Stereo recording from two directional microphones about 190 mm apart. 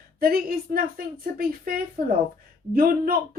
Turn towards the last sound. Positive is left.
turn(degrees=-50)  # may be behind; listen again after turning